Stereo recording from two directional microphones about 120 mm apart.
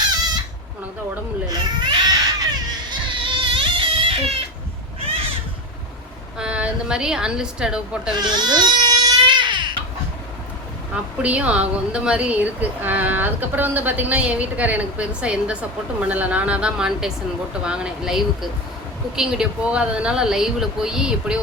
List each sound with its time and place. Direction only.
1.5 s baby cry: 35° right (ahead or behind)
3.1 s a sound: 45° right (ahead or behind)
6.4 s a woman's voice: 10° right (ahead or behind)
8.1 s baby cry: 35° right (ahead or behind)
10.9 s a woman's voice: 10° right (ahead or behind)